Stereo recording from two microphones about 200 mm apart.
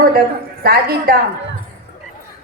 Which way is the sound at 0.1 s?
50° right (ahead or behind).